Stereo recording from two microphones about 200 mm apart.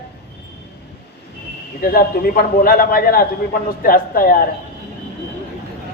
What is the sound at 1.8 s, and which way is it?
A man's voice, 50° left (ahead or behind).